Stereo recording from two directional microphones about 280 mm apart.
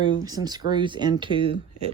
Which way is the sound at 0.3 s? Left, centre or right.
Centre.